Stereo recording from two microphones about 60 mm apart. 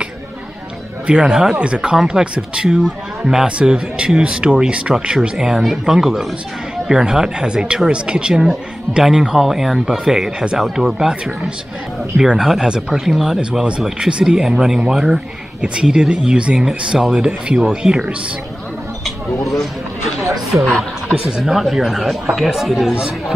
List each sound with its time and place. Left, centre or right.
1.0 s speech: centre
13.4 s speech: centre
19.0 s a sound: centre
20.5 s speech: right
21.4 s speech: centre